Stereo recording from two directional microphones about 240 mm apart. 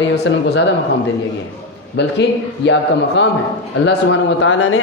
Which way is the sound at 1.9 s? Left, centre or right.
Left.